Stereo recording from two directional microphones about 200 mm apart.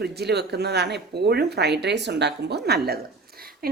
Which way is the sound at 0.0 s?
55° right (ahead or behind).